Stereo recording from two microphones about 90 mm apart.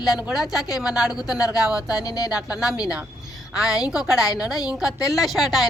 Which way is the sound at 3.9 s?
5° right (ahead or behind).